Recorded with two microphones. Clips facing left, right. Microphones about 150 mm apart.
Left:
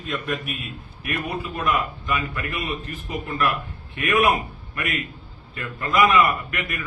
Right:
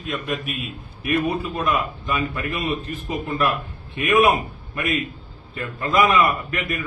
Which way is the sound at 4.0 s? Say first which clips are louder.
Right 3 dB; 20° right (ahead or behind).